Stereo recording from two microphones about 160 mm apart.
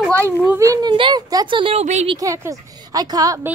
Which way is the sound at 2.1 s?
20° right (ahead or behind).